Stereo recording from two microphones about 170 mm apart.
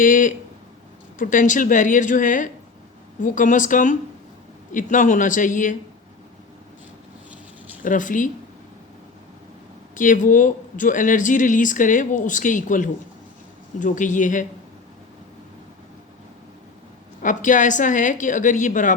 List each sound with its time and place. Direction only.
0.0 s a man's voice: 50° left (ahead or behind)
7.9 s a man's voice: 50° left (ahead or behind)
9.9 s a man's voice: 50° left (ahead or behind)
17.2 s a man's voice: 50° left (ahead or behind)